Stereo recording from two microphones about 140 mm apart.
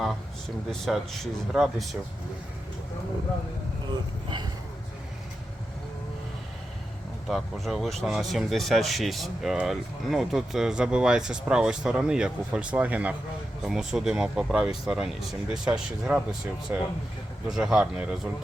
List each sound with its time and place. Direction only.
0.0 s speech: centre (ahead or behind)
4.3 s speech: 30° right (ahead or behind)
7.3 s speech: centre (ahead or behind)
17.5 s speech: 5° right (ahead or behind)